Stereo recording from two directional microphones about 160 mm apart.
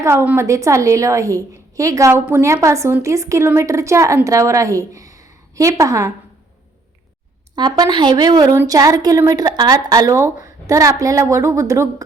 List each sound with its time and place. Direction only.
0.0 s a woman's voice: 15° right (ahead or behind)
7.5 s a woman's voice: 25° right (ahead or behind)